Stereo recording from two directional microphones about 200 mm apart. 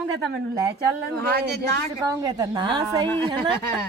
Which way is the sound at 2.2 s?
20° right (ahead or behind).